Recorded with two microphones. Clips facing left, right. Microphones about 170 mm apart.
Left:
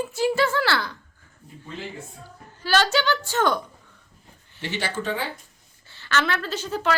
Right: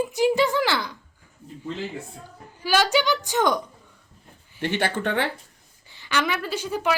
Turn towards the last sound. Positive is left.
turn(degrees=-10)  # may be behind; listen again after turning